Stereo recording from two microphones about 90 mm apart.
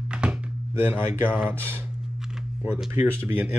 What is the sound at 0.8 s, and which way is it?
Speech, 25° right (ahead or behind).